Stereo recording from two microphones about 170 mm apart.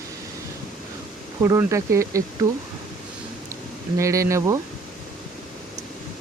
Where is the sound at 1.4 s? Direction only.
15° right (ahead or behind).